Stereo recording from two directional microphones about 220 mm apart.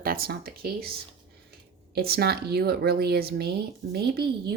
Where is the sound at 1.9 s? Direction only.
45° right (ahead or behind).